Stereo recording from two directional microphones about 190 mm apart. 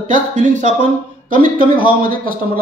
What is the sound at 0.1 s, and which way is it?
A man's voice, 40° right (ahead or behind).